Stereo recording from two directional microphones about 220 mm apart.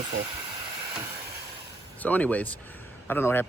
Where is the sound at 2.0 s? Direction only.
5° left (ahead or behind).